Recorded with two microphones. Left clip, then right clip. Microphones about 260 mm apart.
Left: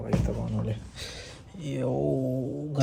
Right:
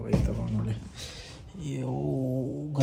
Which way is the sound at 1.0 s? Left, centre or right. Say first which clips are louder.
Left 2 dB; centre.